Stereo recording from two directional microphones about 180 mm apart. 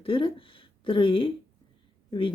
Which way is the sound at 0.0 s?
30° left (ahead or behind).